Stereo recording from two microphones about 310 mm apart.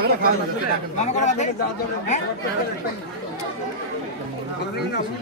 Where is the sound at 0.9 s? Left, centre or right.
Left.